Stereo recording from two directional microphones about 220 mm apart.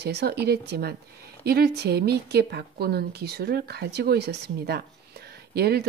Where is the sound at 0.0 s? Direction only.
45° right (ahead or behind).